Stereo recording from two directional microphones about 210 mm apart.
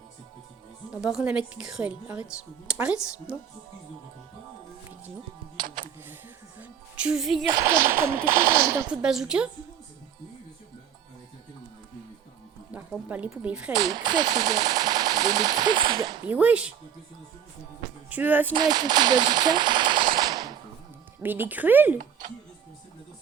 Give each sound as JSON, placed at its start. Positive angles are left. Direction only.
{"t": 0.9, "sound": "speech", "side_deg": -5}
{"t": 6.6, "sound": "music", "side_deg": -5}
{"t": 7.5, "sound": "speech", "side_deg": -15}
{"t": 8.9, "sound": "speech", "side_deg": -5}
{"t": 12.7, "sound": "speech", "side_deg": -5}
{"t": 13.7, "sound": "speech", "side_deg": -20}
{"t": 16.2, "sound": "speech", "side_deg": -5}
{"t": 18.1, "sound": "speech", "side_deg": -10}
{"t": 18.5, "sound": "speech", "side_deg": -20}